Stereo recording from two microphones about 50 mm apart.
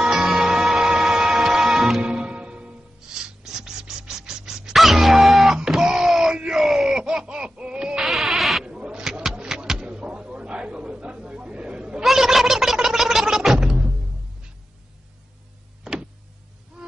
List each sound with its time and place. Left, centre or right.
0.0 s music: centre
2.0 s music: centre
3.5 s scratch: centre
4.4 s music: centre
5.6 s screaming: centre
7.1 s laughter: centre
8.0 s a sound: centre
8.6 s bleat: centre
9.0 s a sound: centre
12.0 s a sound: centre
15.8 s power windows: centre